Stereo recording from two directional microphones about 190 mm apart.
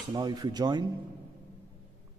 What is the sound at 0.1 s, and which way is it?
Speech, 20° right (ahead or behind).